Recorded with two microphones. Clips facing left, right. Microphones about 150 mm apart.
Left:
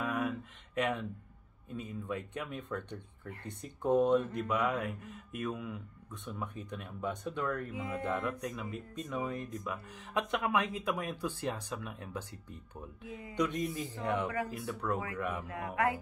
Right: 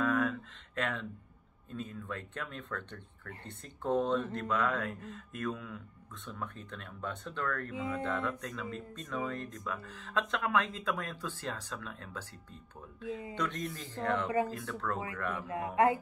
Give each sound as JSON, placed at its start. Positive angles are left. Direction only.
{"t": 0.0, "sound": "a sound", "side_deg": 15}
{"t": 1.7, "sound": "speech", "side_deg": 15}
{"t": 15.4, "sound": "speech", "side_deg": -25}